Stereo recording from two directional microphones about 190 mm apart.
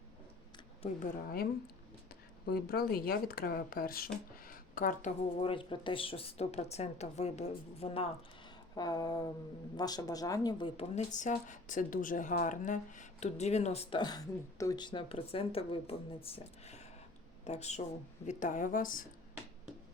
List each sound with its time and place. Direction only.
1.3 s speech: 55° left (ahead or behind)
5.4 s speech: 25° left (ahead or behind)
8.7 s speech: 20° left (ahead or behind)
10.8 s speech: 40° left (ahead or behind)